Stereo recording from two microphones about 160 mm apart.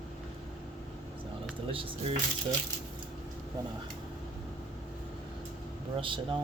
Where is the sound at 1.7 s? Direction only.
35° right (ahead or behind).